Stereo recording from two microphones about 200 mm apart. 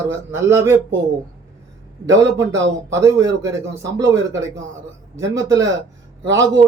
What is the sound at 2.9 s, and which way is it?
A man's voice, 15° right (ahead or behind).